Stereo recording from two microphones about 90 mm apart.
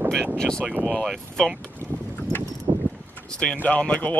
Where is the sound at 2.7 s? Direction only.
75° right (ahead or behind).